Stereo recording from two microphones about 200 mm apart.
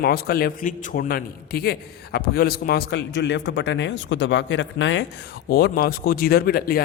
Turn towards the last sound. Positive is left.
turn(degrees=50)  # may be behind; listen again after turning